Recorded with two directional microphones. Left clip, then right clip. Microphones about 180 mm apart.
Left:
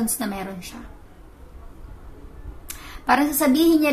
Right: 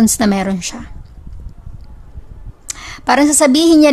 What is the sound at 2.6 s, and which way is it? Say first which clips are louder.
A woman's voice: right 6 dB; 50° right (ahead or behind).